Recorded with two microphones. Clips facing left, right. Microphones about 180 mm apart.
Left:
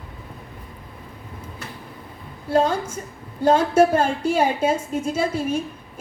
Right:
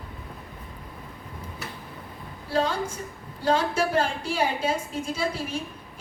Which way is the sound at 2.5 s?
50° left (ahead or behind).